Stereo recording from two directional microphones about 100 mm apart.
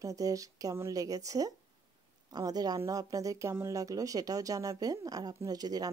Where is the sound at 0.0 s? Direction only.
35° right (ahead or behind).